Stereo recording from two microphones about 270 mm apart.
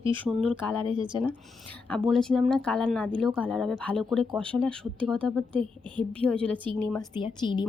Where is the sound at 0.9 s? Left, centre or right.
Centre.